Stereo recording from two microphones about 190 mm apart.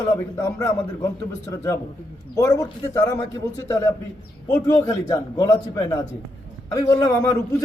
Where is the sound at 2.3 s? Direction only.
20° left (ahead or behind).